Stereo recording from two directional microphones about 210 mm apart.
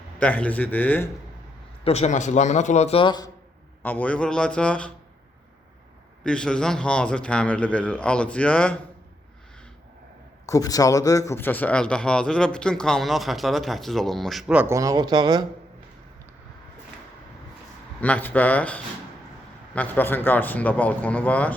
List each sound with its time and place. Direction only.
0.2 s a man's voice: 5° left (ahead or behind)
1.8 s a man's voice: 30° left (ahead or behind)
3.8 s a man's voice: 5° left (ahead or behind)
6.2 s a man's voice: 5° left (ahead or behind)
10.4 s a man's voice: 15° left (ahead or behind); by 15.4 s 20° right (ahead or behind)
18.0 s a man's voice: 10° left (ahead or behind)